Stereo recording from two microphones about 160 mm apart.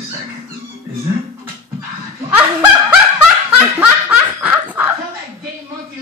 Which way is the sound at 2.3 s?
10° right (ahead or behind).